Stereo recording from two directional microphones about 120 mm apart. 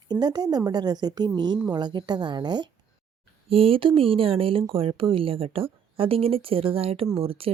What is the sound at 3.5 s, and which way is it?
Speech, 50° right (ahead or behind).